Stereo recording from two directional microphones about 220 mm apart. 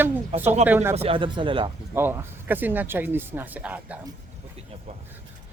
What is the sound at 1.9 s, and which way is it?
Speech, 10° right (ahead or behind).